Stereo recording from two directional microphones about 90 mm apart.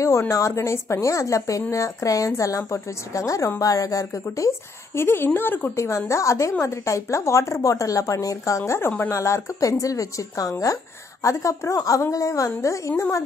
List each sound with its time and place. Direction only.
0.0 s a woman's voice: 35° left (ahead or behind)
5.8 s a woman's voice: 35° left (ahead or behind)
9.1 s a woman's voice: 35° left (ahead or behind)